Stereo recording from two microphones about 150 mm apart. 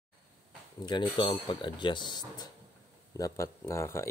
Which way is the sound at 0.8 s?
30° left (ahead or behind).